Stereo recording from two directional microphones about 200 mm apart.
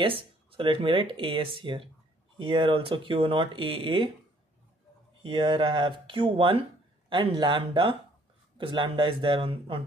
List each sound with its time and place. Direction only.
0.0 s speech: 25° right (ahead or behind)
5.2 s speech: 25° right (ahead or behind)